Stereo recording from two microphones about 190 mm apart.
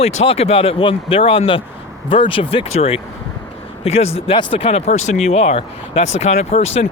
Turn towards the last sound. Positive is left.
turn(degrees=35)  # may be behind; listen again after turning